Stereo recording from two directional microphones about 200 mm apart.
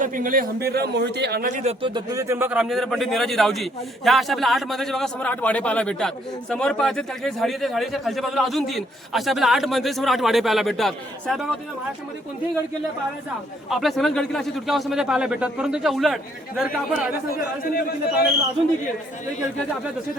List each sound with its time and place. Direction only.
0.0 s speech: 40° right (ahead or behind)
1.8 s a man's voice: 20° right (ahead or behind); by 11.4 s centre (ahead or behind)
13.7 s a man's voice: centre (ahead or behind)
17.3 s a man's voice: 45° left (ahead or behind)